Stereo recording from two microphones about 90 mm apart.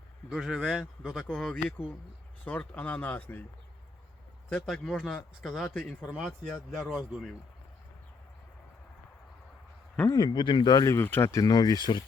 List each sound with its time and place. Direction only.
0.3 s speech: centre (ahead or behind)
2.4 s speech: 15° left (ahead or behind)
4.4 s speech: 5° left (ahead or behind)
5.8 s speech: 15° left (ahead or behind)
6.7 s speech: centre (ahead or behind)
10.1 s speech: 50° left (ahead or behind)
10.8 s speech: 25° left (ahead or behind); by 12.0 s 50° left (ahead or behind)